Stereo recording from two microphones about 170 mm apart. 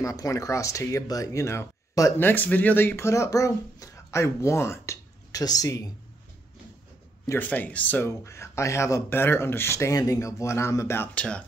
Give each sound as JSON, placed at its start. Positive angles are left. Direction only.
{"t": 0.0, "sound": "speech", "side_deg": 20}
{"t": 7.2, "sound": "speech", "side_deg": 10}